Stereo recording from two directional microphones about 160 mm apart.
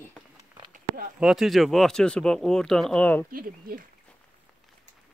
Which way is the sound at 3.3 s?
65° right (ahead or behind).